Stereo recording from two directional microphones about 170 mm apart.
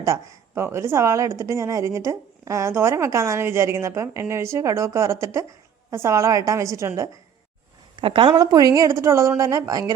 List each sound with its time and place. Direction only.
0.0 s a woman's voice: 20° right (ahead or behind)
8.0 s a woman's voice: 30° right (ahead or behind)